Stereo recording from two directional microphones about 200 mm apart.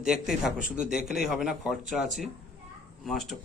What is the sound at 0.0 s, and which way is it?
A man's voice, 5° right (ahead or behind).